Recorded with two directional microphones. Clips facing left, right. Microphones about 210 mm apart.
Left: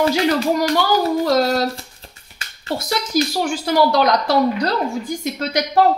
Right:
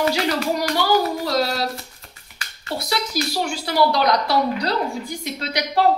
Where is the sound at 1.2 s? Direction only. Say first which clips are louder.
Left 5 dB; 45° left (ahead or behind).